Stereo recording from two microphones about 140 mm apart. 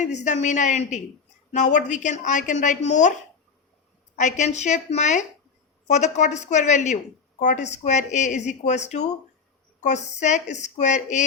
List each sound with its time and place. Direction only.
0.0 s a woman's voice: 60° left (ahead or behind)
4.2 s a woman's voice: 60° left (ahead or behind)